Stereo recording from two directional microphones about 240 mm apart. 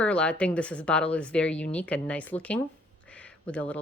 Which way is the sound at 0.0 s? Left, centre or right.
Centre.